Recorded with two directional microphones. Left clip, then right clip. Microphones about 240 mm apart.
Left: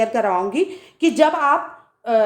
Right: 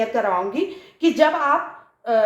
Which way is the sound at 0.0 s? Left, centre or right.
Left.